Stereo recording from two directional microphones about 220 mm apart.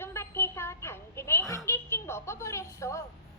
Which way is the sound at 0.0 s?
10° left (ahead or behind).